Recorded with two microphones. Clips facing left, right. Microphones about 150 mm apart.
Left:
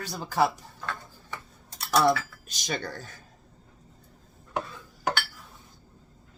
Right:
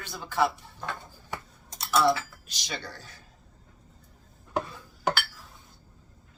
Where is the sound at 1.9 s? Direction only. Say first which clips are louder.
Left 1 dB; 45° left (ahead or behind).